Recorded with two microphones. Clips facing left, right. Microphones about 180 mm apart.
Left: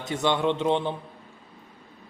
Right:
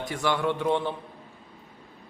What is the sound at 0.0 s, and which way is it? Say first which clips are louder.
Speech: left 2 dB; 20° left (ahead or behind).